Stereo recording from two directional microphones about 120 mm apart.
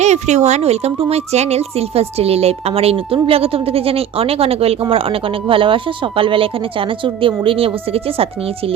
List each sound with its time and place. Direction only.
0.0 s a woman's voice: 70° right (ahead or behind); by 8.7 s 55° right (ahead or behind)